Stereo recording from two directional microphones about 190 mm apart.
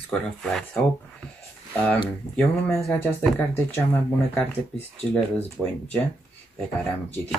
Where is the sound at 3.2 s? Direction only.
10° left (ahead or behind).